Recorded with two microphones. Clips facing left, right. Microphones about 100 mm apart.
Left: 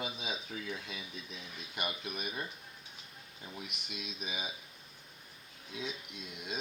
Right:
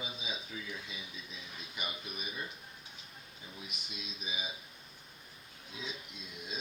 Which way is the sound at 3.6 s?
65° left (ahead or behind).